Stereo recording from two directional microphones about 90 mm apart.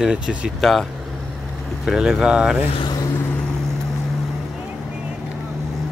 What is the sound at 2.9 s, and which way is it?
Vehicle, 45° left (ahead or behind).